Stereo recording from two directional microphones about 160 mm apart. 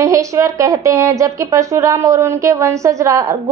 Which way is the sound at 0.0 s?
20° right (ahead or behind).